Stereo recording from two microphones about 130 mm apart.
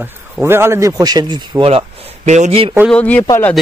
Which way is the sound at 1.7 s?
55° right (ahead or behind).